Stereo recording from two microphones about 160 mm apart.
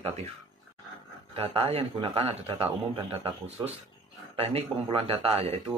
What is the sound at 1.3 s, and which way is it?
Speech, 35° right (ahead or behind).